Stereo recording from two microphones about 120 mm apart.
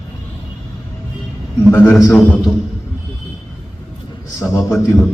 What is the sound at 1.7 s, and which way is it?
Speech, 20° left (ahead or behind).